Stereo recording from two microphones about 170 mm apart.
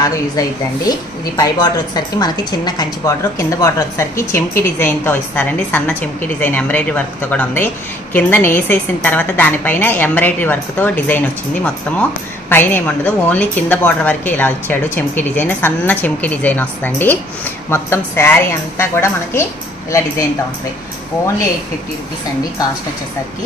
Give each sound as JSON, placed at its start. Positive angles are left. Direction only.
{"t": 0.4, "sound": "a woman's voice", "side_deg": 20}